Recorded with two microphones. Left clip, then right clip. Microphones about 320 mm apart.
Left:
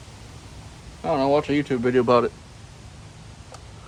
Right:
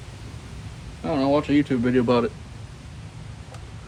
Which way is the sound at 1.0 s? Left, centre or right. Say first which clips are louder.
Left 1 dB; centre.